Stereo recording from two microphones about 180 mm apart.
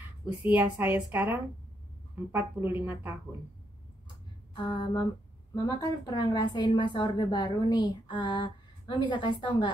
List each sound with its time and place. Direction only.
0.4 s a woman's voice: 10° right (ahead or behind)
4.6 s a woman's voice: 25° left (ahead or behind)